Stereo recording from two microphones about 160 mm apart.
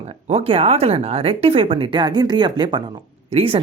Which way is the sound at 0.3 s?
35° right (ahead or behind).